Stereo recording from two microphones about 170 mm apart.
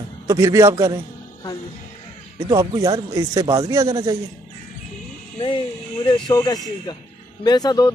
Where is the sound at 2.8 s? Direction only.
20° right (ahead or behind).